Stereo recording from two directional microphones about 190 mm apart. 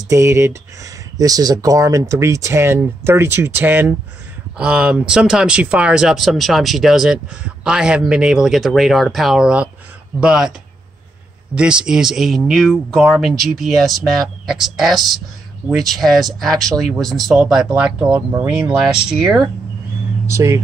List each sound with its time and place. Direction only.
0.1 s speech: 15° right (ahead or behind)
11.5 s speech: 5° right (ahead or behind)
20.2 s speech: 15° right (ahead or behind)